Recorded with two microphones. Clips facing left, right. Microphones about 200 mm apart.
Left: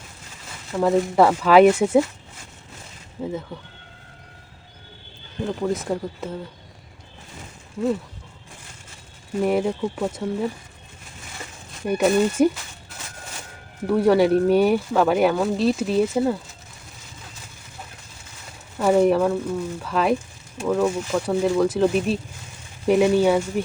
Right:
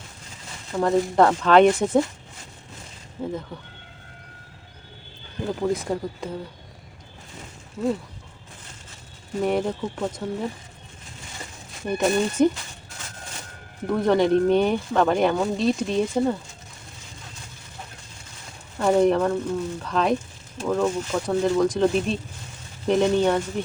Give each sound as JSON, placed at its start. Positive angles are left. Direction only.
{"t": 0.8, "sound": "speech", "side_deg": 5}
{"t": 3.2, "sound": "speech", "side_deg": 5}
{"t": 5.6, "sound": "speech", "side_deg": 0}
{"t": 9.4, "sound": "speech", "side_deg": 5}
{"t": 11.9, "sound": "speech", "side_deg": 10}
{"t": 13.8, "sound": "speech", "side_deg": 10}
{"t": 18.8, "sound": "speech", "side_deg": 5}